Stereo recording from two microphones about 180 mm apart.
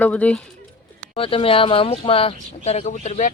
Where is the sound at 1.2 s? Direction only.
30° left (ahead or behind).